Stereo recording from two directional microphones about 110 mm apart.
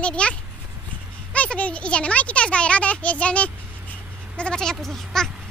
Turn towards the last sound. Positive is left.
turn(degrees=5)  # may be behind; listen again after turning